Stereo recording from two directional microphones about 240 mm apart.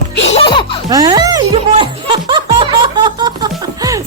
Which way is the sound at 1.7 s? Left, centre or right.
Right.